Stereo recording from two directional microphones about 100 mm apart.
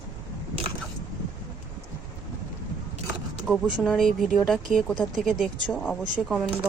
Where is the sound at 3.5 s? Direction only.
Centre (ahead or behind).